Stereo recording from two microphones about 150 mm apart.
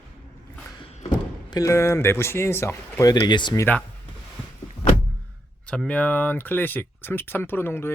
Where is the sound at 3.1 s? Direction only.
30° left (ahead or behind).